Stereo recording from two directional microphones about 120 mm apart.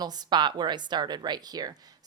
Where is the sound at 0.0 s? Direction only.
35° right (ahead or behind).